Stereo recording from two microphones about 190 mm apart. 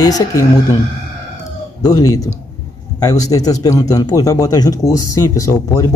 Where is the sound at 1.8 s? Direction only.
20° left (ahead or behind).